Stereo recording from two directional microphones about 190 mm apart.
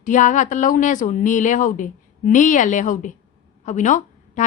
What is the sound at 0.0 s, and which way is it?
A woman's voice, 40° left (ahead or behind).